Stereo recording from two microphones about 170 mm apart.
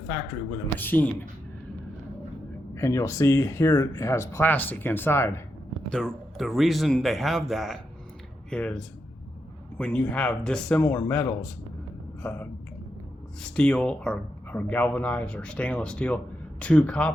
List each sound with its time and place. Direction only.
0.8 s speech: 10° left (ahead or behind)
2.7 s speech: 15° left (ahead or behind)
5.9 s speech: centre (ahead or behind)
13.4 s speech: 5° left (ahead or behind)